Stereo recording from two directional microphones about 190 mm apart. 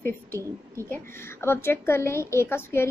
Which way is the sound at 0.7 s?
15° left (ahead or behind).